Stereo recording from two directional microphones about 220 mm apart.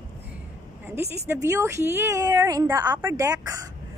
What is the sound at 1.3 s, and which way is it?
A woman's voice, 10° right (ahead or behind).